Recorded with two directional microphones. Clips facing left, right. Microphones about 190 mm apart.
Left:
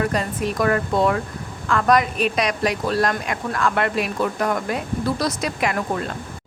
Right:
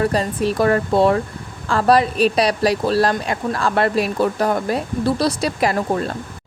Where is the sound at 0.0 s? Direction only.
30° right (ahead or behind).